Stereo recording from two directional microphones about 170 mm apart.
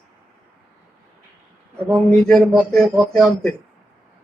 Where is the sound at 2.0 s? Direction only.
5° left (ahead or behind).